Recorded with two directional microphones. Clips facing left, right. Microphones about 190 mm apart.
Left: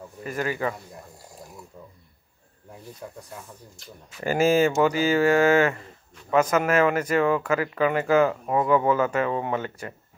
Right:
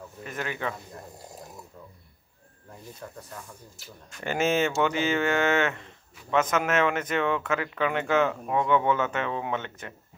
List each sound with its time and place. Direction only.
0.2 s speech: centre (ahead or behind)
3.0 s speech: 10° left (ahead or behind)
3.7 s speech: centre (ahead or behind)